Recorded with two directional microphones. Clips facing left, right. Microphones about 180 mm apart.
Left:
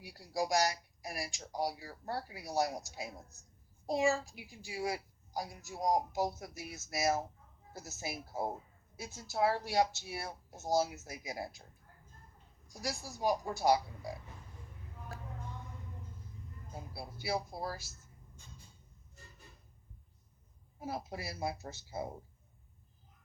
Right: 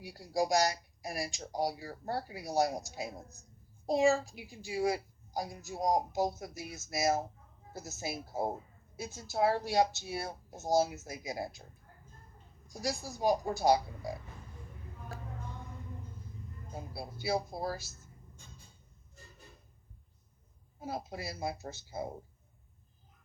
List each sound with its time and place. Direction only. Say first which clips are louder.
0.0 s a child's voice: right 4 dB; 25° right (ahead or behind)
13.1 s a child's voice: right 3 dB; 20° right (ahead or behind)
16.7 s a child's voice: right 3 dB; 20° right (ahead or behind)
20.8 s a child's voice: right 1 dB; 25° right (ahead or behind)